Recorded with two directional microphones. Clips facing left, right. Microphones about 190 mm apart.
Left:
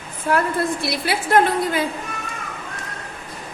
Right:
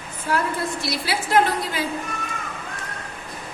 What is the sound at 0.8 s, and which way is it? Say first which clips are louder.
A woman's voice: left 3 dB; 55° left (ahead or behind).